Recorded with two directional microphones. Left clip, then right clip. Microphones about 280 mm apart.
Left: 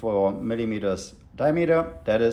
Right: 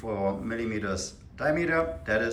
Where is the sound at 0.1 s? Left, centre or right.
Centre.